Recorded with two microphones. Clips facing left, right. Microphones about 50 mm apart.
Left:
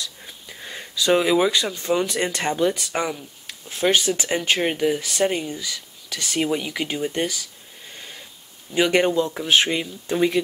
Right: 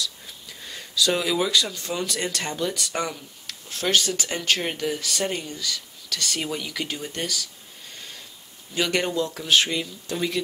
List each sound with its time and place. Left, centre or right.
0.0 s speech: left
8.7 s speech: left